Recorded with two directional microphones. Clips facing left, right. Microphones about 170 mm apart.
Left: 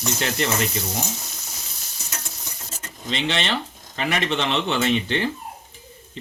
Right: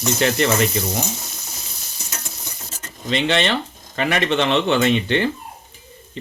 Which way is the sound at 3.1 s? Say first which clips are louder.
Right 5 dB; 60° right (ahead or behind).